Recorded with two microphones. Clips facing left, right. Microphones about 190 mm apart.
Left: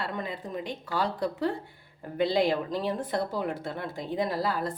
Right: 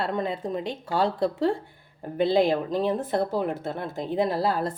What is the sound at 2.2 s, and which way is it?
Speech, 50° right (ahead or behind).